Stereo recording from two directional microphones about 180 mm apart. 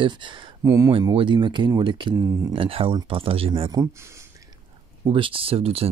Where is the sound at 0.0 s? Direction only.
25° right (ahead or behind).